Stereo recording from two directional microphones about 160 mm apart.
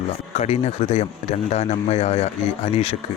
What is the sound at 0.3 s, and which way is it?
A man's voice, 40° left (ahead or behind).